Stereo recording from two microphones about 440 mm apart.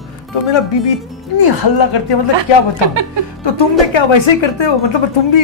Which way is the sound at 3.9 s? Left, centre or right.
Left.